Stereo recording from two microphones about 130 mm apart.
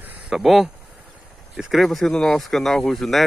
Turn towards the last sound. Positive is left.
turn(degrees=0)  # may be behind; listen again after turning